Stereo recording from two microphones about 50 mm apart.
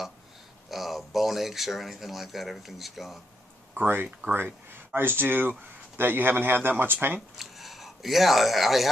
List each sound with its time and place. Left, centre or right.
0.7 s speech: centre
3.7 s speech: right
7.3 s speech: centre